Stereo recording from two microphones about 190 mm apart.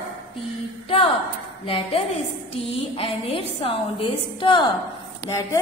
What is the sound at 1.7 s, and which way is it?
A woman's voice, 30° left (ahead or behind).